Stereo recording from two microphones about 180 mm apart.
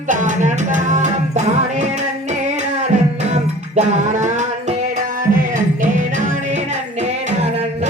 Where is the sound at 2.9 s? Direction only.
40° right (ahead or behind).